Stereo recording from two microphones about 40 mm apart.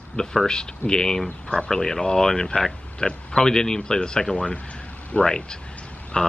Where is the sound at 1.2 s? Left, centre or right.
Left.